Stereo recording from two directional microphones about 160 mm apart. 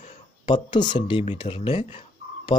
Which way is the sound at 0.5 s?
30° left (ahead or behind).